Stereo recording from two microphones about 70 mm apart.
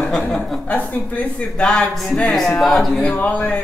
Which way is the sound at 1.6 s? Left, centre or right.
Centre.